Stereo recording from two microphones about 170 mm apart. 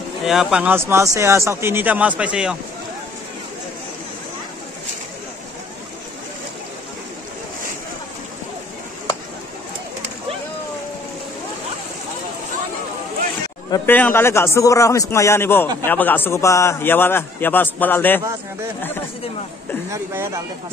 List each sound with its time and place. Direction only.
0.2 s speech: centre (ahead or behind)
13.8 s a man's voice: 10° left (ahead or behind)
19.9 s speech: 15° right (ahead or behind)